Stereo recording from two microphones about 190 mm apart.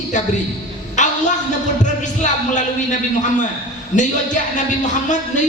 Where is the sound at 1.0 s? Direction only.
40° left (ahead or behind).